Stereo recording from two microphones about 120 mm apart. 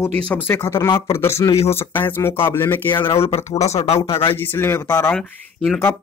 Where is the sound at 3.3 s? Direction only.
65° left (ahead or behind).